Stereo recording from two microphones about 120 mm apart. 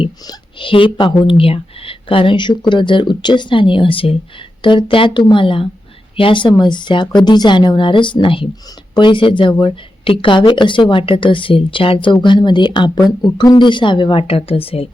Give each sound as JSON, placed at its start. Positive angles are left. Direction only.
{"t": 0.3, "sound": "a woman's voice", "side_deg": 45}